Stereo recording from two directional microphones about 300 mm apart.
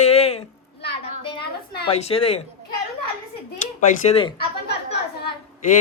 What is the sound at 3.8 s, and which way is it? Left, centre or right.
Speech, centre.